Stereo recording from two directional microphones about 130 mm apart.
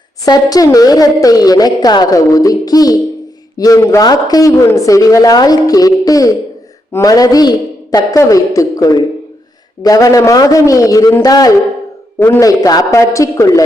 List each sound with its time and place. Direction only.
0.3 s a woman's voice: 30° left (ahead or behind)